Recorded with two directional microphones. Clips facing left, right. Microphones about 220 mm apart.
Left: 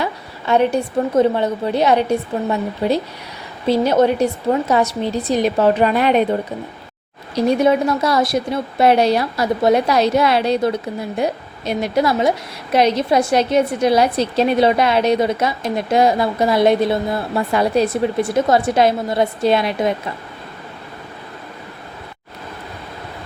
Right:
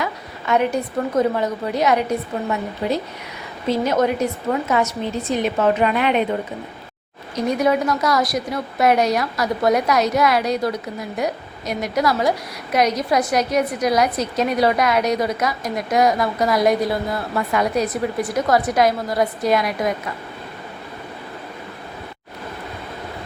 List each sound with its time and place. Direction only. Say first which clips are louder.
0.0 s a woman's voice: left 2 dB; 30° left (ahead or behind)
7.3 s a woman's voice: left 4 dB; 30° left (ahead or behind)